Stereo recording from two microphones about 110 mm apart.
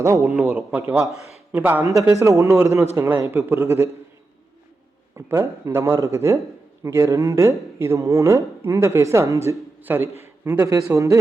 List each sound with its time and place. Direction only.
0.2 s a man's voice: 15° right (ahead or behind)
2.1 s speech: 30° right (ahead or behind)
5.1 s speech: 25° right (ahead or behind)